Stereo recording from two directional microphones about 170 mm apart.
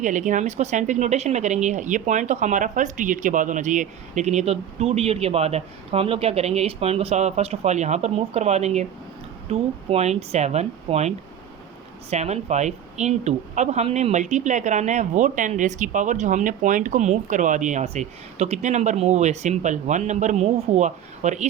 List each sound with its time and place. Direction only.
0.0 s a woman's voice: 50° right (ahead or behind)
12.1 s a woman's voice: 40° right (ahead or behind)